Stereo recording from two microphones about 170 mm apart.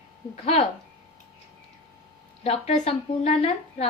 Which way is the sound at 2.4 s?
35° left (ahead or behind).